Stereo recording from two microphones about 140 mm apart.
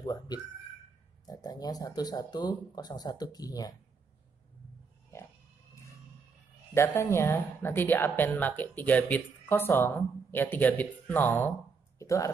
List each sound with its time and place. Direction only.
0.0 s speech: 25° left (ahead or behind)
6.7 s speech: 15° left (ahead or behind)
12.0 s a sound: 20° left (ahead or behind)